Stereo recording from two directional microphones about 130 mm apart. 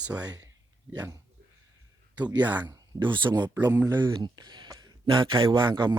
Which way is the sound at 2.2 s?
10° right (ahead or behind).